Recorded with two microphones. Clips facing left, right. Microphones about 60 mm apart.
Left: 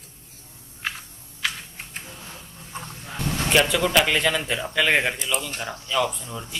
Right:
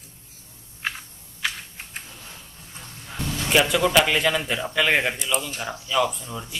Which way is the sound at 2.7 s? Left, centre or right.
Left.